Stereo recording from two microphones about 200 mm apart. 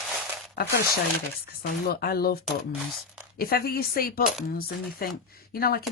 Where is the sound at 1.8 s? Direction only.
50° left (ahead or behind).